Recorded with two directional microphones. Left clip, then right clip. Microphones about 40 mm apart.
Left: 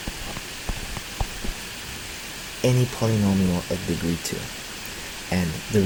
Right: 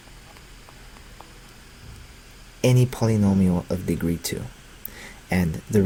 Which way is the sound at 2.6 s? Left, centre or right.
Right.